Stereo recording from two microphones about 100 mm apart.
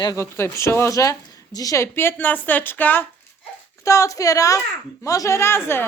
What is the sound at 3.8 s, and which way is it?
A woman's voice, 30° left (ahead or behind).